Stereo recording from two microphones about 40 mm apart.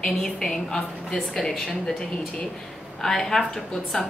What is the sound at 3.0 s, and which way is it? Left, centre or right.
Speech, centre.